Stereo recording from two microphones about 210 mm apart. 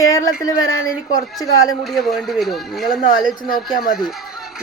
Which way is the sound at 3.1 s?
20° left (ahead or behind).